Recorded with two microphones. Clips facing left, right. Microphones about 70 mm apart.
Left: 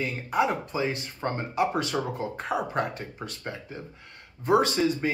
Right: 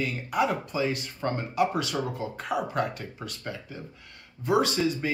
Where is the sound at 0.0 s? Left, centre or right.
Left.